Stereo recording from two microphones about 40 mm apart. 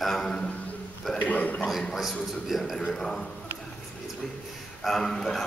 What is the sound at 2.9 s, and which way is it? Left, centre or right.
Speech, centre.